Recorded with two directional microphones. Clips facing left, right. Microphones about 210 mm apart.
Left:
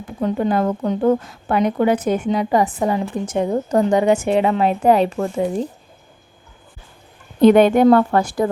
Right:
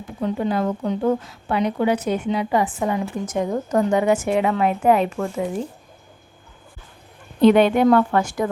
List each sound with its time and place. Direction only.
0.2 s a woman's voice: 50° left (ahead or behind); by 5.3 s 30° left (ahead or behind)
7.4 s a woman's voice: 45° left (ahead or behind)